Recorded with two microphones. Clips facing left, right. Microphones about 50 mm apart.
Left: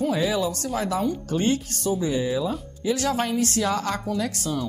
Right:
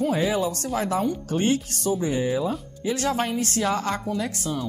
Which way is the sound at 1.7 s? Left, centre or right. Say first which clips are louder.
Even; right.